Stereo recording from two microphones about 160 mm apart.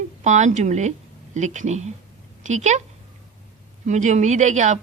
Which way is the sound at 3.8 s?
50° right (ahead or behind).